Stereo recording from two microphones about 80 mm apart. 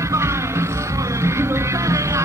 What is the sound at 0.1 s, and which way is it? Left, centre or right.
Music, right.